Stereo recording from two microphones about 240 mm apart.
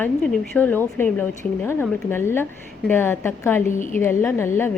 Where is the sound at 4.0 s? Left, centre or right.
Centre.